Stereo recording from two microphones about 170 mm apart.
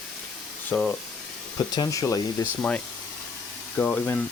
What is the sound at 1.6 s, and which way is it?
Speech, 25° left (ahead or behind).